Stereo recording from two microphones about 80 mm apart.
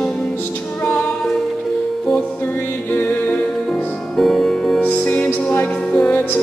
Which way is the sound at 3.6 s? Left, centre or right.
Centre.